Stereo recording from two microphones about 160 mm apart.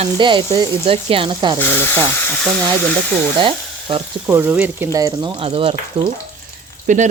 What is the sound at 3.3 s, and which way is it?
Speech, 30° right (ahead or behind).